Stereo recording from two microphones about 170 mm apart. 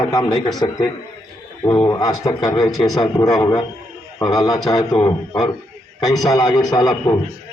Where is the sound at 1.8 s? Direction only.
20° left (ahead or behind).